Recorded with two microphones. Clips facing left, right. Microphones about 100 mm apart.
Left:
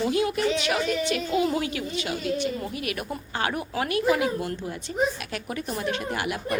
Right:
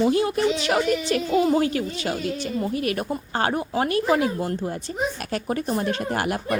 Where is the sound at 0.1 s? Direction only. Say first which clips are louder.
Right 3 dB; 30° right (ahead or behind).